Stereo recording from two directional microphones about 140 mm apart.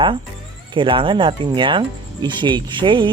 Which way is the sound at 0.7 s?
35° right (ahead or behind).